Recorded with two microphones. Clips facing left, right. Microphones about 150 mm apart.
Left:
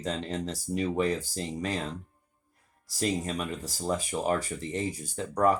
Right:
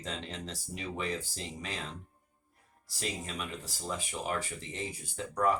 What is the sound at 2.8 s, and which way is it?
Speech, 40° left (ahead or behind).